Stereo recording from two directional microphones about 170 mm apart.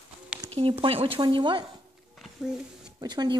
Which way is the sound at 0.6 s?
30° right (ahead or behind).